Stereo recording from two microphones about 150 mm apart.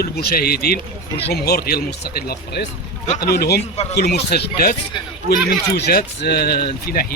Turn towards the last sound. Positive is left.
turn(degrees=85)